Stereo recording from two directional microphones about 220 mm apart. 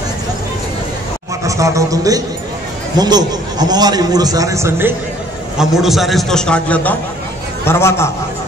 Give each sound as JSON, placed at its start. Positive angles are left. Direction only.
{"t": 1.4, "sound": "a man's voice", "side_deg": -15}